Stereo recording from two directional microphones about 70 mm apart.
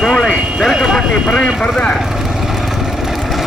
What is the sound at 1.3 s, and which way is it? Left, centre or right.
Speech, centre.